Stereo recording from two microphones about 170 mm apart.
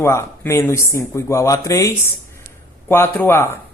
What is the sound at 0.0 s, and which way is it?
Speech, 15° left (ahead or behind).